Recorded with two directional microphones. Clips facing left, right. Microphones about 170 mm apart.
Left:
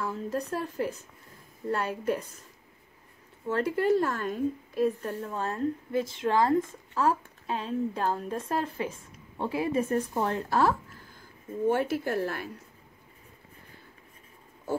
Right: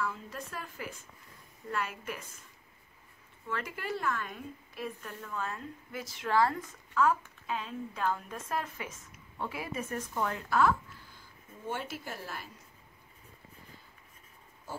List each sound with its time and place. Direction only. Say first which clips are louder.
0.0 s a woman's voice: left 6 dB; 40° left (ahead or behind)
3.4 s a woman's voice: left 12 dB; 35° left (ahead or behind)
11.7 s speech: left 9 dB; 55° left (ahead or behind)